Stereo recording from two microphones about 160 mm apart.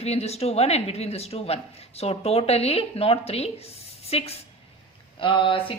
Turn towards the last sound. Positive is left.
turn(degrees=35)  # may be behind; listen again after turning